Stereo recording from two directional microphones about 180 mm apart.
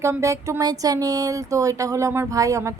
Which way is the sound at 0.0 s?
15° right (ahead or behind).